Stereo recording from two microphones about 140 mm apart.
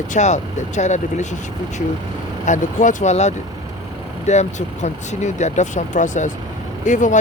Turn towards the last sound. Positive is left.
turn(degrees=65)  # may be behind; listen again after turning